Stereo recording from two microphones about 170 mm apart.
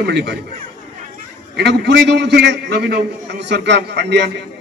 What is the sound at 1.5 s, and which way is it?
A man's voice, 85° right.